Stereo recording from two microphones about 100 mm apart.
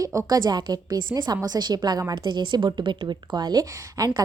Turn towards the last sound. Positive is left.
turn(degrees=-35)  # may be behind; listen again after turning